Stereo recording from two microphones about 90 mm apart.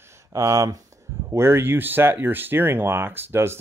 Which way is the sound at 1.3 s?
25° right (ahead or behind).